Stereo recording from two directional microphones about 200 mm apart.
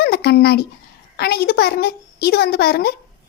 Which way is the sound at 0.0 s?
55° left (ahead or behind).